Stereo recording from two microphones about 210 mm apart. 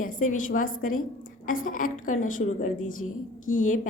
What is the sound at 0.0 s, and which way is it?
A woman's voice, 40° left (ahead or behind).